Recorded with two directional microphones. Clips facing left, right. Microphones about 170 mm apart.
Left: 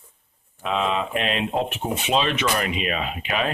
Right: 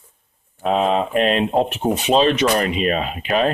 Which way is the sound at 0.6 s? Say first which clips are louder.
Right 6 dB; 40° right (ahead or behind).